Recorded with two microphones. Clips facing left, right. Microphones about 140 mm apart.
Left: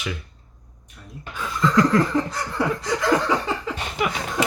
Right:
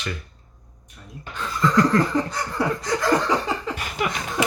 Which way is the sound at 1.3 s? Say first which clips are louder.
Even; 5° left (ahead or behind).